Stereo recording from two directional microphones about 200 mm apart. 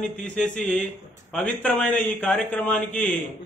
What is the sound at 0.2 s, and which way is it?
Speech, 5° left (ahead or behind).